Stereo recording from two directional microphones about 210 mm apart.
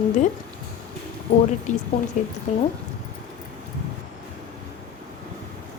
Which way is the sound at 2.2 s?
35° left (ahead or behind).